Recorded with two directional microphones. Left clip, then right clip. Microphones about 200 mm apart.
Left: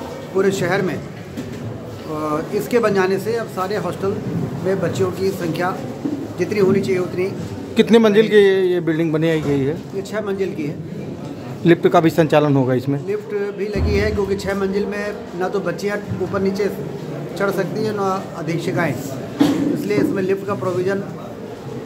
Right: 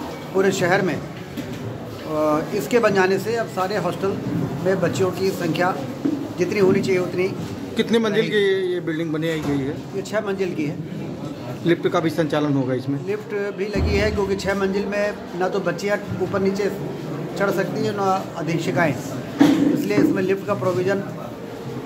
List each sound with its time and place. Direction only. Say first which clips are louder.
0.4 s a man's voice: left 1 dB; 10° right (ahead or behind)
2.2 s a man's voice: even; 5° right (ahead or behind)
7.7 s a man's voice: left 7 dB; 30° left (ahead or behind)
10.1 s a man's voice: even; 10° right (ahead or behind)
11.6 s a man's voice: left 6 dB; 35° left (ahead or behind)
13.1 s a man's voice: left 1 dB; 10° right (ahead or behind)